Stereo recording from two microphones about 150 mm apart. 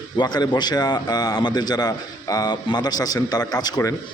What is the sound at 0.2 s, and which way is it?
A man's voice, 25° left (ahead or behind).